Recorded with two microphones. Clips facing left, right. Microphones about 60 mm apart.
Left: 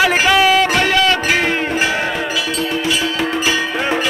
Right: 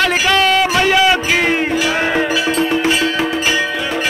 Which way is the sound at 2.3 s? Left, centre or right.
Right.